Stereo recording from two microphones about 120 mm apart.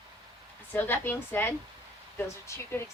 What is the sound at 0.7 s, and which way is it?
Speech, 15° left (ahead or behind).